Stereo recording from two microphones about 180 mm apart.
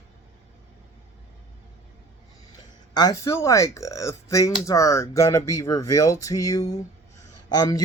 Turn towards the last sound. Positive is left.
turn(degrees=20)  # may be behind; listen again after turning